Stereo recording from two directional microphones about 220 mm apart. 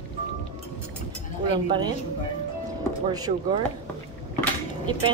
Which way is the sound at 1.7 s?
20° right (ahead or behind).